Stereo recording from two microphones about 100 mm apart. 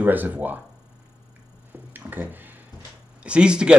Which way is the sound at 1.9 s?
20° right (ahead or behind).